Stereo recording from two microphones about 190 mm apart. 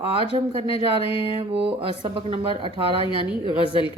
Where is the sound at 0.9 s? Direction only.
30° left (ahead or behind).